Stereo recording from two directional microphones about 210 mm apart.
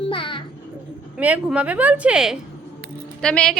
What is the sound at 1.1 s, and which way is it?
A woman's voice, 5° right (ahead or behind).